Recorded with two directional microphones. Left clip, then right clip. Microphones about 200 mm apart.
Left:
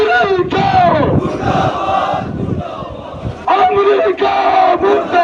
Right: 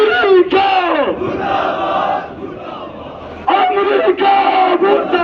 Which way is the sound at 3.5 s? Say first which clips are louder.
Left 2 dB; 20° left (ahead or behind).